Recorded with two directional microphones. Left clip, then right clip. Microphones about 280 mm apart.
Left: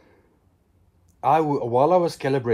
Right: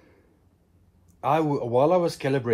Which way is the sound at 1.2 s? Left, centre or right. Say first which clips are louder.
Left 4 dB; left.